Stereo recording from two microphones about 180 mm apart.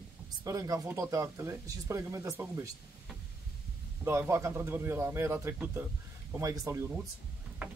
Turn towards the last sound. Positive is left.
turn(degrees=-15)  # may be behind; listen again after turning